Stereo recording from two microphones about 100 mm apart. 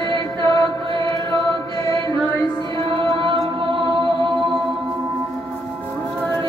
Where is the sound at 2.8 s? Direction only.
60° right (ahead or behind).